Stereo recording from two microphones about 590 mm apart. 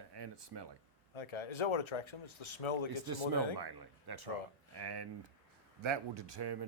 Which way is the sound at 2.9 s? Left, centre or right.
Right.